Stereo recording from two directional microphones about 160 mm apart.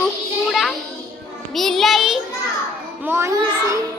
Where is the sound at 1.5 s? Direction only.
Centre (ahead or behind).